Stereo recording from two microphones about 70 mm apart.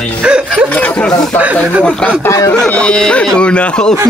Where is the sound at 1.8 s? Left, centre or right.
Centre.